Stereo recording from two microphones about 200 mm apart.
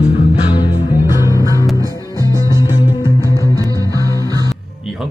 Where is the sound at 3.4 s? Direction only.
15° left (ahead or behind).